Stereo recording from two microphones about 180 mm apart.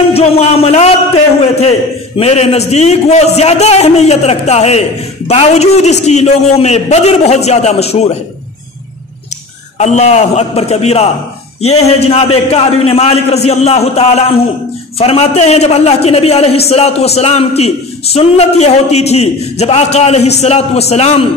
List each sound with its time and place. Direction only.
0.1 s a man's voice: 35° left (ahead or behind)
9.8 s a man's voice: 40° left (ahead or behind)